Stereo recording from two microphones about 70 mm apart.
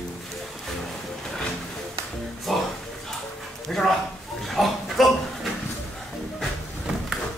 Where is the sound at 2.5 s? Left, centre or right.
Centre.